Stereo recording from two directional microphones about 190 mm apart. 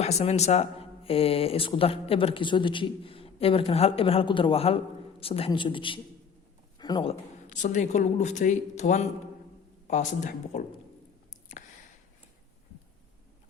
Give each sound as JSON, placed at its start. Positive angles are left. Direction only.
{"t": 0.0, "sound": "speech", "side_deg": 35}